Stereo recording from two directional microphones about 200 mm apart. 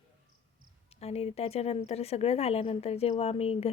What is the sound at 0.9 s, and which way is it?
A woman's voice, 30° left (ahead or behind).